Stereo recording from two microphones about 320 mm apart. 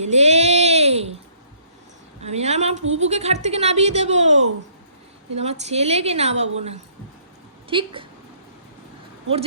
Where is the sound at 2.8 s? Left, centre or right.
Right.